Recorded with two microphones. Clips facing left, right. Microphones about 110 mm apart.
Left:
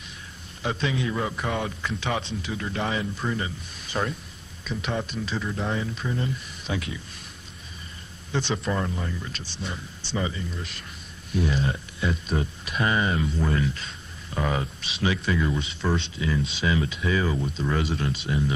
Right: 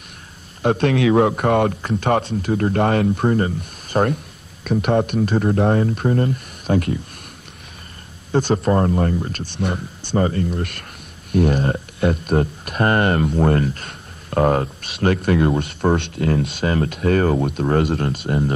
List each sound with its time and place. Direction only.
0.6 s a man's voice: 55° right (ahead or behind)
8.3 s a man's voice: 45° right (ahead or behind)